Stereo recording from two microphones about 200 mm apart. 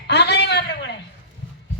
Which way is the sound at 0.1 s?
60° left (ahead or behind).